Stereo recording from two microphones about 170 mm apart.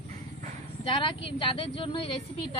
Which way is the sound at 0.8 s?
30° left (ahead or behind).